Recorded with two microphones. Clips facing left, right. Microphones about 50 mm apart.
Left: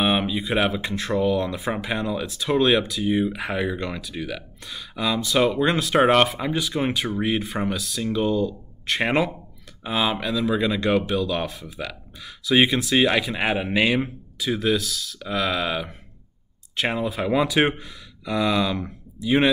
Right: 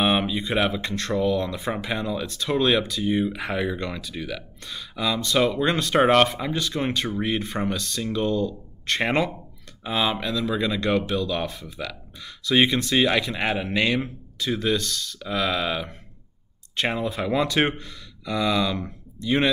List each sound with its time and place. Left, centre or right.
0.0 s speech: centre